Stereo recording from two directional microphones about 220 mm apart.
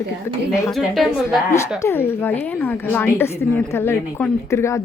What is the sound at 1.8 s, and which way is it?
Speech, 10° left (ahead or behind).